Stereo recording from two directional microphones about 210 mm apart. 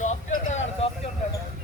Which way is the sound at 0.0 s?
35° left (ahead or behind).